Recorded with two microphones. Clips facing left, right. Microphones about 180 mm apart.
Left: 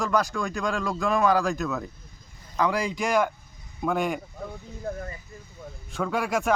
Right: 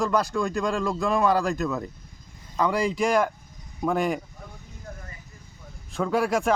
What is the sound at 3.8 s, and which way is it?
Speech, centre (ahead or behind).